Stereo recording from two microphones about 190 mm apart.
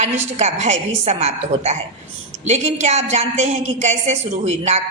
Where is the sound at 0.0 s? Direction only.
35° right (ahead or behind).